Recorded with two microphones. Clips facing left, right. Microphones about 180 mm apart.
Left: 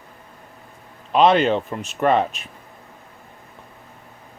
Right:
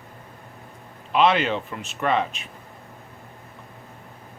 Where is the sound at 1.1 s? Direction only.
40° left (ahead or behind).